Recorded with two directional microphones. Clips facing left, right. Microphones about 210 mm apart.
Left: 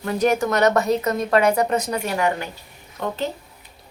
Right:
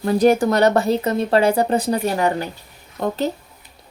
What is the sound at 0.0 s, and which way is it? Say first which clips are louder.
A woman's voice: right 5 dB; 35° right (ahead or behind).